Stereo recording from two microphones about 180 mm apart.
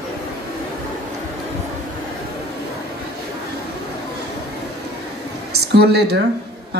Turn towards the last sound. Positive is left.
turn(degrees=-65)  # may be behind; listen again after turning